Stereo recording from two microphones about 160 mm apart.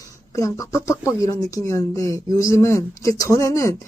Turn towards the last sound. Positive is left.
turn(degrees=20)  # may be behind; listen again after turning